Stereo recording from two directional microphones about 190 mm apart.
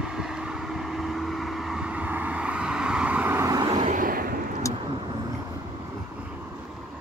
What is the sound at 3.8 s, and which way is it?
Vehicle, 45° right (ahead or behind).